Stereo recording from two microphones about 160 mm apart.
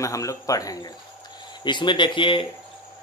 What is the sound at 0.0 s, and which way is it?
A man's voice, 20° left (ahead or behind).